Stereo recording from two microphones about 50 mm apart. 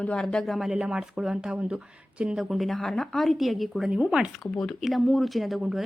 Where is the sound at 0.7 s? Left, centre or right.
Centre.